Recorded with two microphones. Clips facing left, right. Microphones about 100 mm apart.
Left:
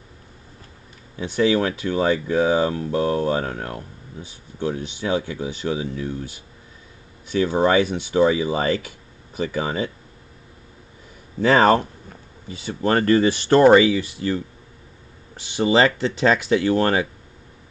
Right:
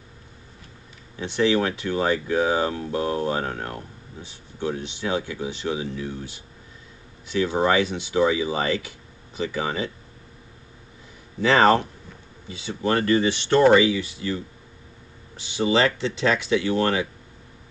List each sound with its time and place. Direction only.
1.2 s speech: 45° left (ahead or behind)
11.4 s speech: 40° left (ahead or behind)
15.6 s speech: 40° left (ahead or behind)